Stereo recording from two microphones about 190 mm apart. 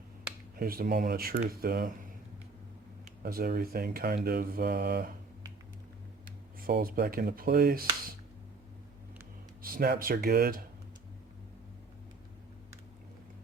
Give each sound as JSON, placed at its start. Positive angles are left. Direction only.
{"t": 0.6, "sound": "speech", "side_deg": -50}
{"t": 3.2, "sound": "speech", "side_deg": -50}
{"t": 6.6, "sound": "speech", "side_deg": -50}
{"t": 9.6, "sound": "speech", "side_deg": -50}